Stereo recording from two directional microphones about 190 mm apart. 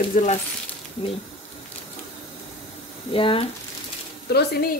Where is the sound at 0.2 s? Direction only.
40° left (ahead or behind).